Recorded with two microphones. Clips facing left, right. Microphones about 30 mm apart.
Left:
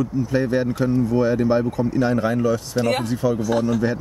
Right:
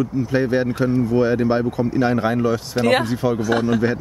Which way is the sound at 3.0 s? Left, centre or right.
Right.